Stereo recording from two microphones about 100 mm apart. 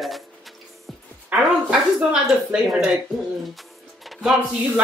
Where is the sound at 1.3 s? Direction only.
15° right (ahead or behind).